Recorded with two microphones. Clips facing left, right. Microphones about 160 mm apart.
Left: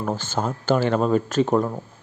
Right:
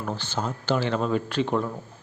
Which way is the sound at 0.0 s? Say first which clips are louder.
Left 4 dB; 45° left (ahead or behind).